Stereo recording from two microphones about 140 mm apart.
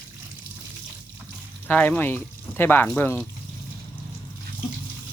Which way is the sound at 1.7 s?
10° left (ahead or behind).